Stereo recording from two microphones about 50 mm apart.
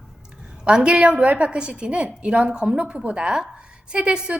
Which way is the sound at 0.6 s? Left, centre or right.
Centre.